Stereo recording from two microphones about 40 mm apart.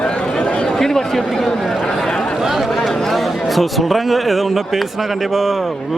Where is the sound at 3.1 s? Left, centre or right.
Centre.